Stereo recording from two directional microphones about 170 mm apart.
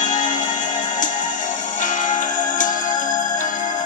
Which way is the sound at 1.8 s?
50° left (ahead or behind).